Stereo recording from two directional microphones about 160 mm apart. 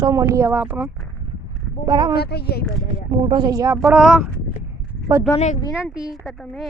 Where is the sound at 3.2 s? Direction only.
25° right (ahead or behind).